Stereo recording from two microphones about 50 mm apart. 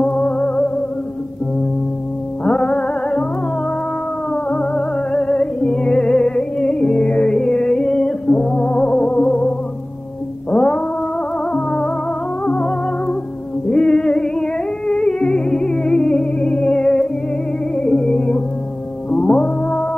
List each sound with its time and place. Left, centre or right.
0.0 s music: centre
2.4 s music: centre
4.3 s music: centre